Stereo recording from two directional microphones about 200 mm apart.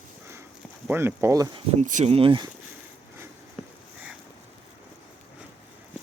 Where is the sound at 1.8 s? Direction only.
35° right (ahead or behind).